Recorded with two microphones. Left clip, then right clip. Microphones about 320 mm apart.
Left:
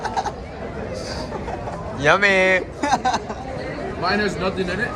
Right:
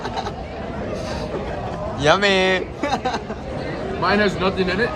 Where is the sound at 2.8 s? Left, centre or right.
Centre.